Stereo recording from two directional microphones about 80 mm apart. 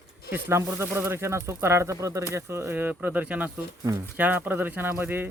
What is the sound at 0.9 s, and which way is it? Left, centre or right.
Speech, right.